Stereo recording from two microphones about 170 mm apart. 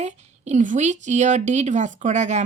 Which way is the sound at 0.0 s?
40° right (ahead or behind).